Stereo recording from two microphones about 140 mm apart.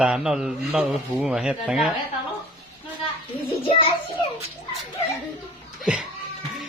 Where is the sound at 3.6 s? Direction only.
40° left (ahead or behind).